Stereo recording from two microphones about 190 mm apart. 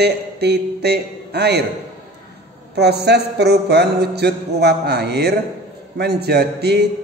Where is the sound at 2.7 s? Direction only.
60° right (ahead or behind).